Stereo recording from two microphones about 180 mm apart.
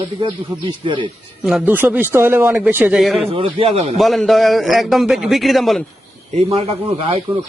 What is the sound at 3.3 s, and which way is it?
Speech, 30° right (ahead or behind).